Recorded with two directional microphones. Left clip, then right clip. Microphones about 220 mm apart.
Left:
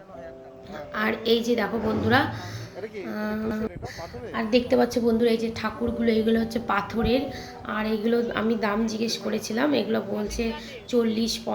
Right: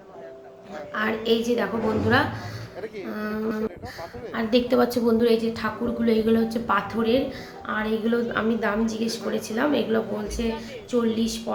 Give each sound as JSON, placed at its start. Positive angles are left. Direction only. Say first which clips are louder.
{"t": 0.9, "sound": "a woman's voice", "louder": "even", "side_deg": 15}